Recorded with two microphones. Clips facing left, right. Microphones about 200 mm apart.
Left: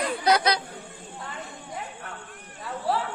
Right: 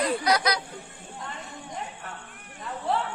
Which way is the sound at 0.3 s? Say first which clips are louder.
Left 6 dB; 30° left (ahead or behind).